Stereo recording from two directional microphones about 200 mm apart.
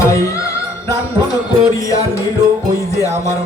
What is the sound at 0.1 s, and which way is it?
Music, 15° left (ahead or behind).